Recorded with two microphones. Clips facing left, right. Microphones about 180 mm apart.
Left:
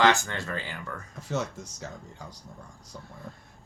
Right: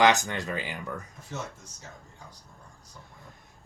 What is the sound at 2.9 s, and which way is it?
Speech, 90° left.